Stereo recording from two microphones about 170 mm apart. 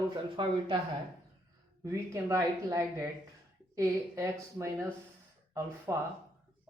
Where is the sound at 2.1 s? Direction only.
20° right (ahead or behind).